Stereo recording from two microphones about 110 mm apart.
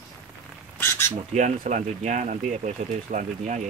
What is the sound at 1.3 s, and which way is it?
Speech, 90° right.